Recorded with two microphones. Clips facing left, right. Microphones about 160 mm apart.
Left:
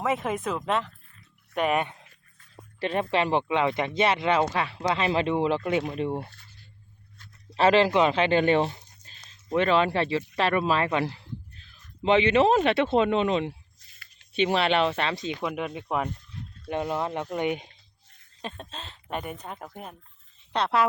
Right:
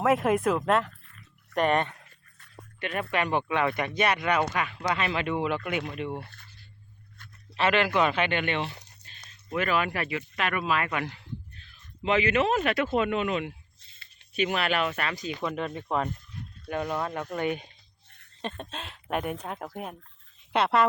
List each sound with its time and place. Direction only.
0.0 s speech: 5° right (ahead or behind)
2.8 s speech: 30° left (ahead or behind)
7.5 s speech: 30° left (ahead or behind)
13.8 s a sound: 25° right (ahead or behind)
14.3 s speech: 30° left (ahead or behind)
15.4 s speech: 10° left (ahead or behind)
18.4 s speech: centre (ahead or behind)